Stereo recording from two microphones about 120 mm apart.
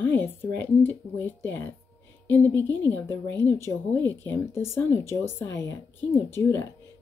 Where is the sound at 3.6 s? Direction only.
15° left (ahead or behind).